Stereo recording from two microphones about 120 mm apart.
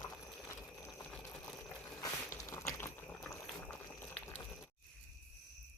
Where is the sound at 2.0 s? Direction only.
25° left (ahead or behind).